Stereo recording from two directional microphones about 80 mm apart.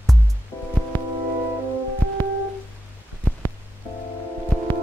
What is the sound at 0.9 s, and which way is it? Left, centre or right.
Music, left.